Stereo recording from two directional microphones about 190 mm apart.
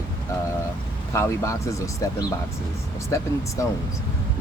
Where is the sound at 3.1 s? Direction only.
15° left (ahead or behind).